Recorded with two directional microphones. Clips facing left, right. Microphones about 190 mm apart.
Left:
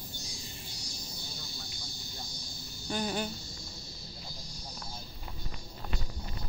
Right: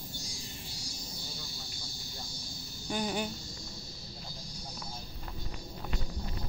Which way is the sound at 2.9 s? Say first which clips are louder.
Even; 10° right (ahead or behind).